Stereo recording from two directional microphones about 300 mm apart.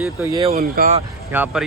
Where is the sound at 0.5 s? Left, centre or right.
Right.